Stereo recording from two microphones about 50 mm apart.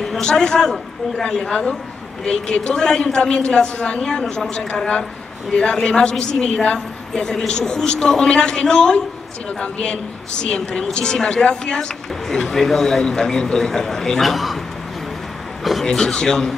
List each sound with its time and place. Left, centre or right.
0.2 s a woman's voice: centre
15.6 s a sound: centre
15.9 s a woman's voice: centre